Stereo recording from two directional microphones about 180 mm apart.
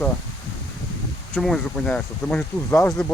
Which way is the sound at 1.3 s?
5° left (ahead or behind).